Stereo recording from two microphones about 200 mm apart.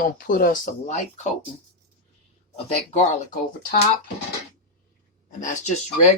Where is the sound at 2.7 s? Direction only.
30° left (ahead or behind).